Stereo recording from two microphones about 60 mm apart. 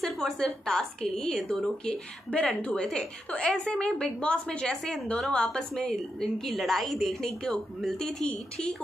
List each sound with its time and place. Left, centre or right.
0.0 s a woman's voice: centre